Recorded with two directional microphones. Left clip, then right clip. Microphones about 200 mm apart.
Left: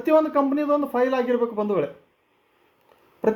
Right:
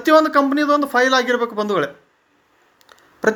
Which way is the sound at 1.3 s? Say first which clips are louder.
Right 3 dB; 25° right (ahead or behind).